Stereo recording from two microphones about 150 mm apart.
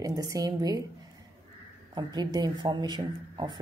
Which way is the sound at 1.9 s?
30° right (ahead or behind).